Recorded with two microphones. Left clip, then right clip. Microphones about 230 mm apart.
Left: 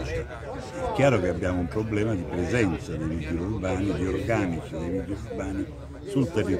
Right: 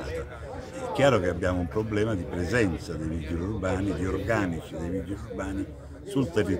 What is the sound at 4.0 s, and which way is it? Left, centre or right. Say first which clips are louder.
Speech: left 1 dB; centre.